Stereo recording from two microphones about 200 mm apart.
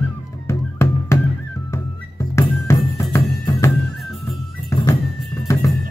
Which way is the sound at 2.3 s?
15° left (ahead or behind).